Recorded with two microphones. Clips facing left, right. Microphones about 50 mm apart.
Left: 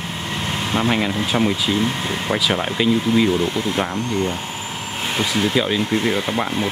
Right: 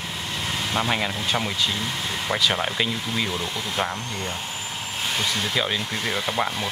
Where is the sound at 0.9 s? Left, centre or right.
Centre.